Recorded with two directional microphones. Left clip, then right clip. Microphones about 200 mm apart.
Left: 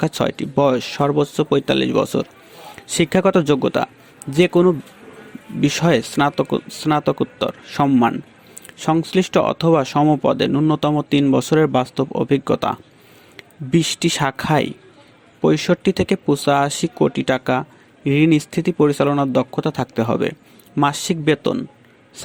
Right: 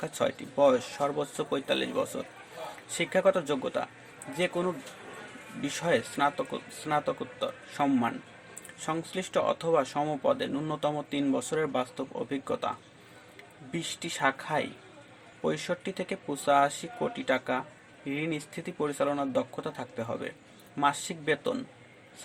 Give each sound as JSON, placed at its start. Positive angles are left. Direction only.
{"t": 0.0, "sound": "speech", "side_deg": 40}